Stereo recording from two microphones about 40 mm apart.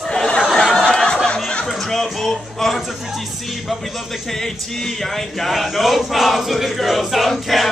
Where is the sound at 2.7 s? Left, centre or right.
Centre.